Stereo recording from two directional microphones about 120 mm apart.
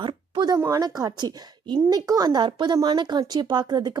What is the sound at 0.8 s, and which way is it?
A woman's voice, 30° right (ahead or behind).